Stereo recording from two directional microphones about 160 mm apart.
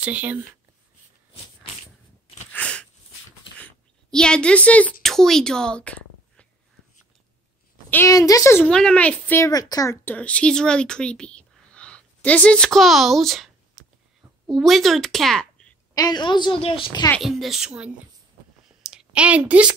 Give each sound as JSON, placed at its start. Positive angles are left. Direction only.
{"t": 0.0, "sound": "speech", "side_deg": -10}
{"t": 2.5, "sound": "a sound", "side_deg": 10}
{"t": 5.0, "sound": "a woman's voice", "side_deg": 0}
{"t": 7.9, "sound": "a woman's voice", "side_deg": 20}
{"t": 8.6, "sound": "a child's voice", "side_deg": 5}
{"t": 14.5, "sound": "speech", "side_deg": 0}
{"t": 15.9, "sound": "a woman's voice", "side_deg": 25}
{"t": 17.2, "sound": "a woman's voice", "side_deg": 0}
{"t": 18.8, "sound": "a sound", "side_deg": -5}